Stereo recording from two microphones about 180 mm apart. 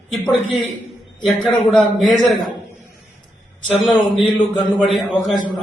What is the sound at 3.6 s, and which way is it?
A man's voice, centre (ahead or behind).